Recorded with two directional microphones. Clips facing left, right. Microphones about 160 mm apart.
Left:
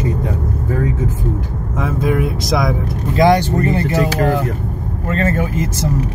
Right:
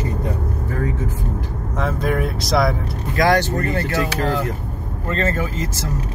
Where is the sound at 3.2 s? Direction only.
20° left (ahead or behind).